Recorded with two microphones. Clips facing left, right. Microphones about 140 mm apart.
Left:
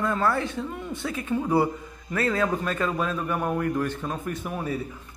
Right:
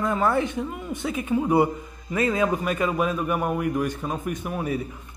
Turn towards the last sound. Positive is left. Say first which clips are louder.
# right 2 dB
turn(degrees=-10)  # may be behind; listen again after turning